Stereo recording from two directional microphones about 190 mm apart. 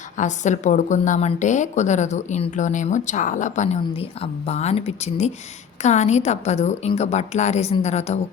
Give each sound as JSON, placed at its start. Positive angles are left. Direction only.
{"t": 0.2, "sound": "a woman's voice", "side_deg": 40}